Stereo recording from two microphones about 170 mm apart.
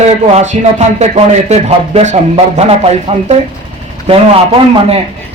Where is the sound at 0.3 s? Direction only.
40° right (ahead or behind).